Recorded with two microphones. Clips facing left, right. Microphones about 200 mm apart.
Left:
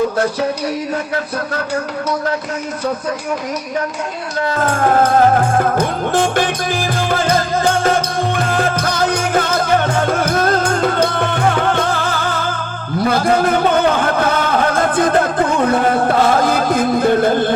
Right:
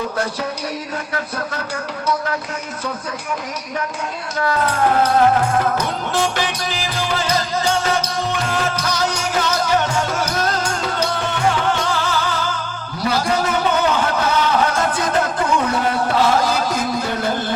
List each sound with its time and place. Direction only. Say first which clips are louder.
4.6 s music: left 4 dB; 50° left (ahead or behind)